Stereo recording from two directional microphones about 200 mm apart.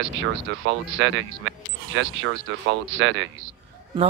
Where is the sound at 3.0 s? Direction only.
70° right (ahead or behind).